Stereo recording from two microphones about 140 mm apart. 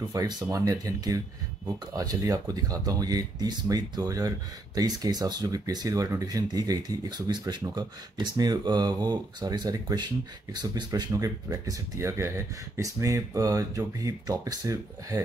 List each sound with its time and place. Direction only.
0.1 s speech: 25° right (ahead or behind)